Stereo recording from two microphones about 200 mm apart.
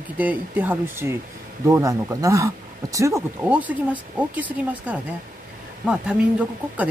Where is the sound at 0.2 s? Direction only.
10° right (ahead or behind).